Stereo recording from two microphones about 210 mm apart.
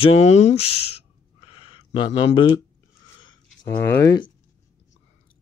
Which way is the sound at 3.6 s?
15° left (ahead or behind).